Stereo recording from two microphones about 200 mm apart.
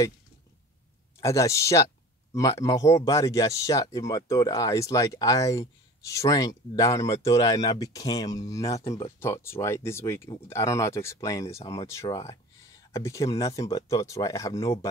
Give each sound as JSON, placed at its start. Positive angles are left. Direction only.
{"t": 1.2, "sound": "speech", "side_deg": 15}